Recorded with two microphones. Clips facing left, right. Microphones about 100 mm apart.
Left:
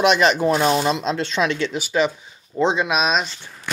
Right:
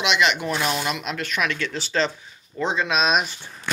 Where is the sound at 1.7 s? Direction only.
10° left (ahead or behind).